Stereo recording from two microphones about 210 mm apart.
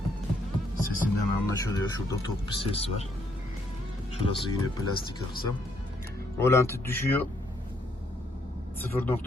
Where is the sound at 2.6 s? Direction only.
30° left (ahead or behind).